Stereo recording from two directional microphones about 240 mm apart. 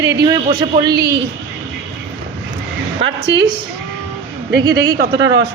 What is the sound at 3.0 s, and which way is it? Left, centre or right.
Speech, right.